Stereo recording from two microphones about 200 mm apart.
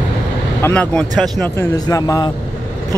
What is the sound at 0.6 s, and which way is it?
Speech, 10° left (ahead or behind).